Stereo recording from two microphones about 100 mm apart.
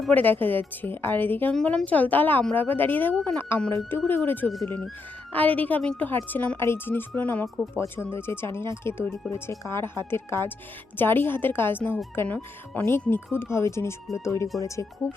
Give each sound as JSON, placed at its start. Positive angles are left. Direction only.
{"t": 0.1, "sound": "a woman's voice", "side_deg": 15}
{"t": 7.4, "sound": "speech", "side_deg": 30}